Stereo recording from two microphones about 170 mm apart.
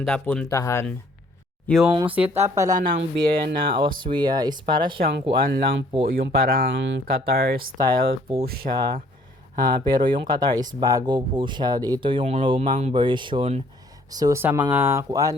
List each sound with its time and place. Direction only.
0.0 s speech: 5° left (ahead or behind)
0.5 s speech: 15° left (ahead or behind)
1.6 s speech: centre (ahead or behind)
1.9 s speech: 30° right (ahead or behind)
2.1 s speech: 10° right (ahead or behind)
3.0 s speech: 55° right (ahead or behind)
4.0 s speech: 25° right (ahead or behind)
4.9 s speech: 65° right (ahead or behind)
8.3 s speech: 30° right (ahead or behind)
12.7 s speech: 40° right (ahead or behind)
13.0 s speech: 30° right (ahead or behind)